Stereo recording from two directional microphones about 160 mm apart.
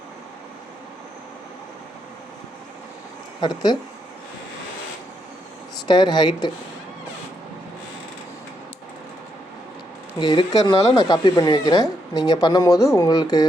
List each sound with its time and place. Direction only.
3.4 s speech: 25° left (ahead or behind)
5.9 s speech: 25° left (ahead or behind)
10.2 s speech: 25° left (ahead or behind)